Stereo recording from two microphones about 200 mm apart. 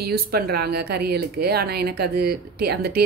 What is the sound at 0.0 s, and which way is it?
A woman's voice, 50° right (ahead or behind).